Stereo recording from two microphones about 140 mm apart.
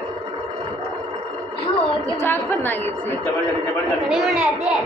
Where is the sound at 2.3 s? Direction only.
15° left (ahead or behind).